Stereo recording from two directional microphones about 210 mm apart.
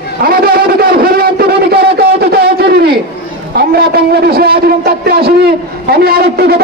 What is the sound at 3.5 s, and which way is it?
A man's voice, 50° right (ahead or behind).